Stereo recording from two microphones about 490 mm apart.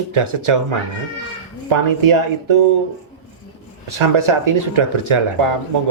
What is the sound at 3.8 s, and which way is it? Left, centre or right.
Speech, right.